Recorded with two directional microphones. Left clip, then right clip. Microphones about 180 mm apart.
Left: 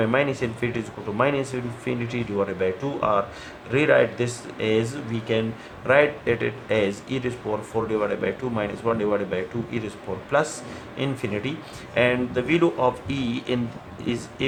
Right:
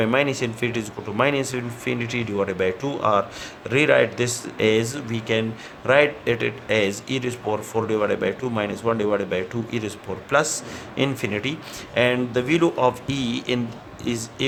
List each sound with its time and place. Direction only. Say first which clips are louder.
0.0 s speech: right 1 dB; 55° right (ahead or behind)